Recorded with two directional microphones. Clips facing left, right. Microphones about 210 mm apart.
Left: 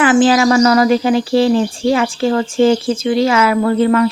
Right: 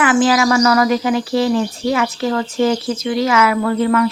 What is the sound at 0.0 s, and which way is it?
Speech, 30° left (ahead or behind).